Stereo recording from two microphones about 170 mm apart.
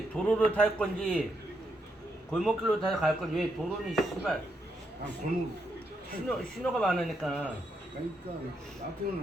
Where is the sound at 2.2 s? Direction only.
Centre (ahead or behind).